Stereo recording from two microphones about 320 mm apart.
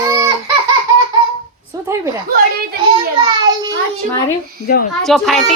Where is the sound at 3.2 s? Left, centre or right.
Centre.